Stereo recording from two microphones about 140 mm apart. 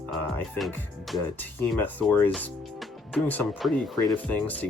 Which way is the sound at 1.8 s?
15° left (ahead or behind).